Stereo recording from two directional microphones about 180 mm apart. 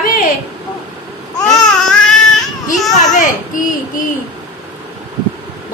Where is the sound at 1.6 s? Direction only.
5° left (ahead or behind).